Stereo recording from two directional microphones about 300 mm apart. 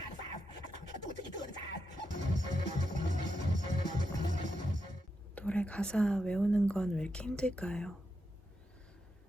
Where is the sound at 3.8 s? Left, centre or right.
Right.